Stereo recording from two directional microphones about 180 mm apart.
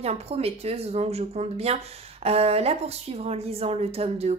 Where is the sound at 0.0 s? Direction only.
35° right (ahead or behind).